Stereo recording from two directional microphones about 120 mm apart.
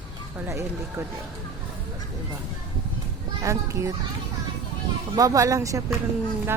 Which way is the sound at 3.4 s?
25° right (ahead or behind).